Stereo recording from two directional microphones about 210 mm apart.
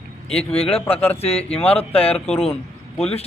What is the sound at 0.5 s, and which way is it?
A man's voice, 25° left (ahead or behind).